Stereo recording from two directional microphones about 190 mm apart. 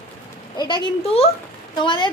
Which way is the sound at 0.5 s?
25° left (ahead or behind).